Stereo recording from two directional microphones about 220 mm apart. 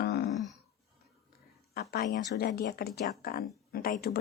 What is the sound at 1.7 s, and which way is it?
Speech, 45° left (ahead or behind).